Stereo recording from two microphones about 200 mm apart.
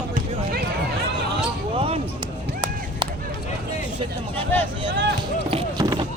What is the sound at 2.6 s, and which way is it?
Run, 20° right (ahead or behind).